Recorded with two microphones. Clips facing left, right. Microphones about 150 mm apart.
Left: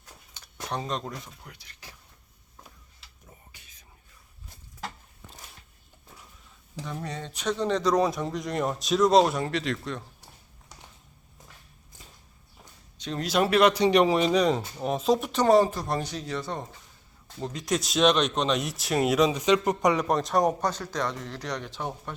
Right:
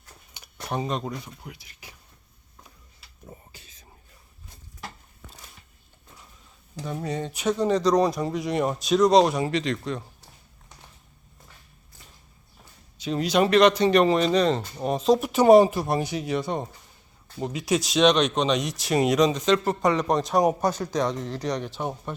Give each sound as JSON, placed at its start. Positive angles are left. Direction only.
{"t": 0.3, "sound": "speech", "side_deg": -10}
{"t": 3.5, "sound": "a sound", "side_deg": -30}
{"t": 6.8, "sound": "speech", "side_deg": -10}
{"t": 13.0, "sound": "speech", "side_deg": -5}